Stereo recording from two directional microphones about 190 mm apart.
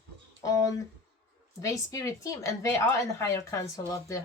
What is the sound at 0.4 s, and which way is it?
Speech, 20° left (ahead or behind).